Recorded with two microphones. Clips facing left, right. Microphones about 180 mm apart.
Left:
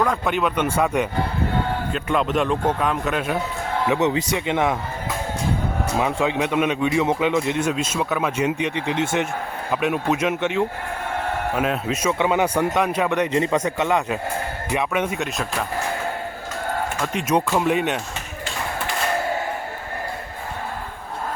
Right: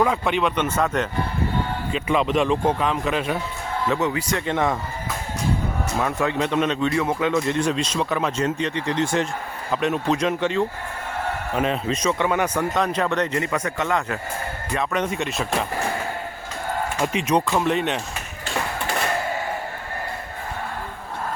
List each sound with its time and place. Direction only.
0.0 s a man's voice: 5° right (ahead or behind)
3.8 s speech: 20° left (ahead or behind)
6.0 s a man's voice: 15° left (ahead or behind)
17.2 s a man's voice: 5° left (ahead or behind)